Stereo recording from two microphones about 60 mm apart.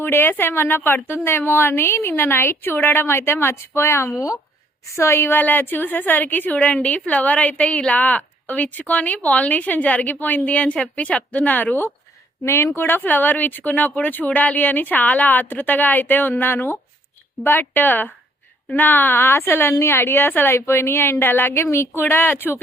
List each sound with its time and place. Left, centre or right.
0.0 s a woman's voice: left
12.5 s a woman's voice: left
20.6 s a woman's voice: left
22.0 s speech: left